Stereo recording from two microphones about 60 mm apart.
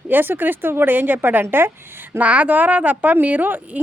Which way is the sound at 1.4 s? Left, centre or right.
Right.